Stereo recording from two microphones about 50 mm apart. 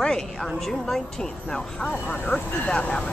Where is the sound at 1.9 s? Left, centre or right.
Left.